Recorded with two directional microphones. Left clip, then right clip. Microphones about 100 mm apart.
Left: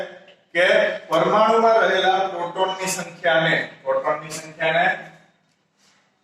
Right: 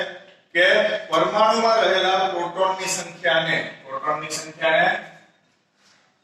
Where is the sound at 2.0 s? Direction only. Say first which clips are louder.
Left 1 dB; 25° left (ahead or behind).